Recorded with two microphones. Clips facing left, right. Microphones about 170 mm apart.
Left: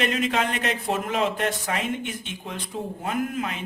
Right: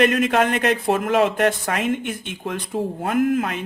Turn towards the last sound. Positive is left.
turn(degrees=-60)  # may be behind; listen again after turning